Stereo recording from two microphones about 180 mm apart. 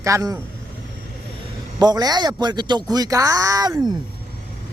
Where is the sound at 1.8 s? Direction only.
20° right (ahead or behind).